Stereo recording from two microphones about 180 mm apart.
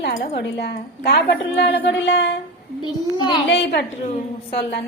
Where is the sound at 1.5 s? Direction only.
75° left (ahead or behind).